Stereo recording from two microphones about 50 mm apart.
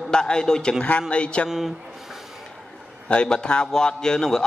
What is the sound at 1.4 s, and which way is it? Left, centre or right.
Speech, centre.